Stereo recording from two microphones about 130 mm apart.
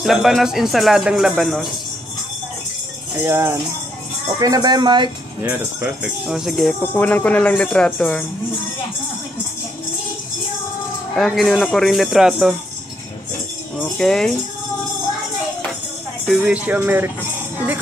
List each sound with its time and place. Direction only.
0.0 s speech: centre (ahead or behind)
3.2 s speech: 20° right (ahead or behind); by 5.1 s 35° right (ahead or behind)
5.4 s speech: 15° right (ahead or behind)
6.0 s speech: 5° right (ahead or behind)
6.8 s speech: 15° left (ahead or behind)
11.1 s speech: centre (ahead or behind)
13.7 s speech: 5° left (ahead or behind)
16.3 s speech: 5° right (ahead or behind)